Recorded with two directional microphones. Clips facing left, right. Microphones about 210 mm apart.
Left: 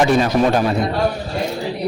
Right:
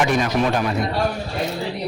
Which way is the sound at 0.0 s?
35° left (ahead or behind).